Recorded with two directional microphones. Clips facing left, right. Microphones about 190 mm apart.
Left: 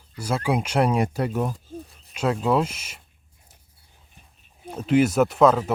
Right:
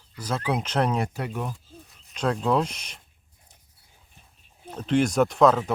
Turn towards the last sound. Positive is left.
turn(degrees=0)  # may be behind; listen again after turning